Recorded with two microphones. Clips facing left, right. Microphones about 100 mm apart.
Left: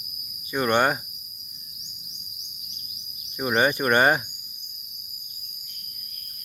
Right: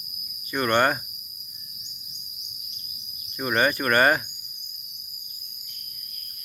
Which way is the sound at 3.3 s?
15° left (ahead or behind).